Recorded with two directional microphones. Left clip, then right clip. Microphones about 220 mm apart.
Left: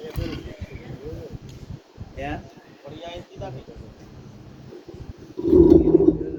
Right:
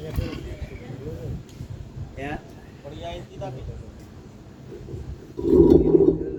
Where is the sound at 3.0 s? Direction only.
10° right (ahead or behind).